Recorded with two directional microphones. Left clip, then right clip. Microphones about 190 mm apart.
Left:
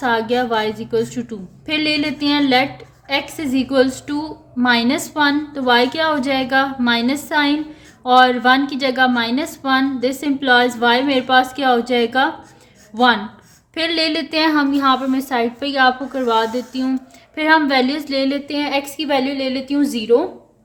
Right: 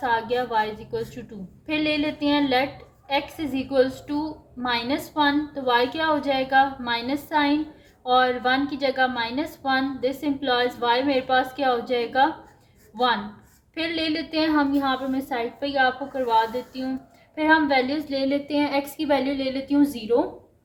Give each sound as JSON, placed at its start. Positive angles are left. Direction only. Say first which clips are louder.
{"t": 0.0, "sound": "a woman's voice", "louder": "left 6 dB", "side_deg": 40}
{"t": 13.7, "sound": "a woman's voice", "louder": "left 8 dB", "side_deg": 40}